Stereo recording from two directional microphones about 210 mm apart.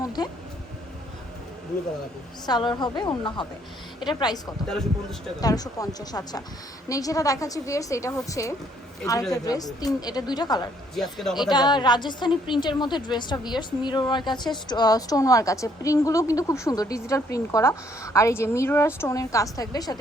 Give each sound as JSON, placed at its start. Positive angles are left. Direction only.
{"t": 0.0, "sound": "a sound", "side_deg": 20}
{"t": 2.5, "sound": "a woman's voice", "side_deg": 20}
{"t": 10.9, "sound": "speech", "side_deg": 0}
{"t": 11.3, "sound": "a woman's voice", "side_deg": 20}